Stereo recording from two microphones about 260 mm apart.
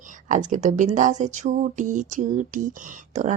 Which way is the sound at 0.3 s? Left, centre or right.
Right.